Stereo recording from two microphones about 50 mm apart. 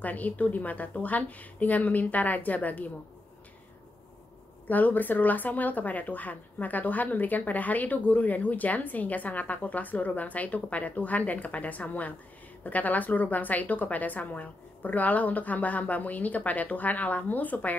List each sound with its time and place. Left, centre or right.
0.0 s speech: left
4.6 s speech: left